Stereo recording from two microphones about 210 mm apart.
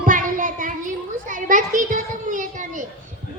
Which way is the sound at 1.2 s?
35° right (ahead or behind).